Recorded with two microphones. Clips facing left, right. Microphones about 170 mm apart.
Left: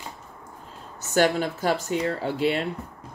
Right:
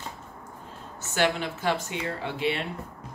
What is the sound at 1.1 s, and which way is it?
Speech, 40° left (ahead or behind).